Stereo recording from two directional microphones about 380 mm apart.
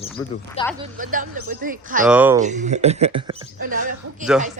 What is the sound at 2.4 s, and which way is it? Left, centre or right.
Speech, centre.